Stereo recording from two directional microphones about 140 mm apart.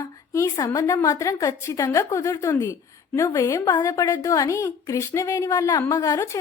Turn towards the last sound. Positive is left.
turn(degrees=25)  # may be behind; listen again after turning